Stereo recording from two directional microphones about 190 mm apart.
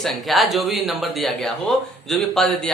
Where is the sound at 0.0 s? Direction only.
Centre (ahead or behind).